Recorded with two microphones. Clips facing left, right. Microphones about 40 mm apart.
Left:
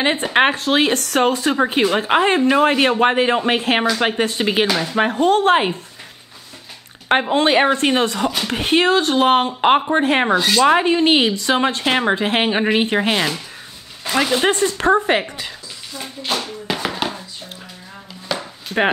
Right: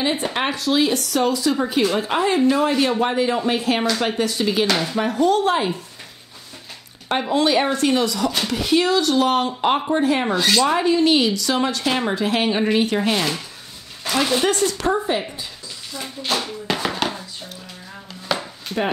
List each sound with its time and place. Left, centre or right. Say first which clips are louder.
0.0 s speech: left 6 dB; left
4.6 s speech: left 1 dB; centre
4.9 s speech: left 4 dB; left
7.1 s speech: left 3 dB; left
10.0 s speech: left 3 dB; left
10.3 s speech: left 2 dB; centre
10.6 s speech: left 5 dB; left
14.4 s speech: left 3 dB; left
15.9 s a sound: even; centre
18.3 s chop: right 1 dB; centre